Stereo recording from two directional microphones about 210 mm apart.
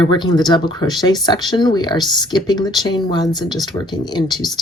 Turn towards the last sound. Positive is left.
turn(degrees=20)  # may be behind; listen again after turning